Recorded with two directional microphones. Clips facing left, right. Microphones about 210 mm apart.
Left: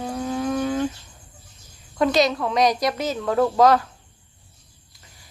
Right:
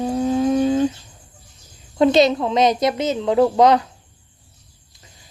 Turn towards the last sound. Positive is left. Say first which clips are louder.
# right 3 dB
turn(degrees=-20)  # may be behind; listen again after turning